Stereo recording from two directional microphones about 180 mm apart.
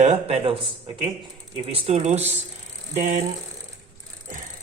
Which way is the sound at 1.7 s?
35° right (ahead or behind).